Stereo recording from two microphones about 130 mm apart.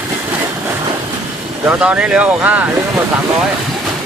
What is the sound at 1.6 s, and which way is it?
Speech, 10° right (ahead or behind).